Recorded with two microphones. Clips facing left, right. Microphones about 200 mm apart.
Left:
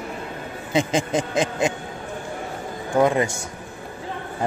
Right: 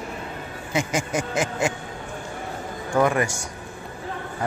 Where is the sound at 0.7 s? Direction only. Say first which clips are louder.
Left 4 dB; 20° left (ahead or behind).